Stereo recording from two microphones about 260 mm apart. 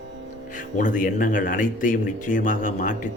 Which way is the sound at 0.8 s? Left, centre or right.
Left.